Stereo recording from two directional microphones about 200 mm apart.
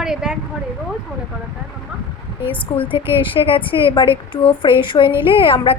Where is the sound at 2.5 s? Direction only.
25° left (ahead or behind).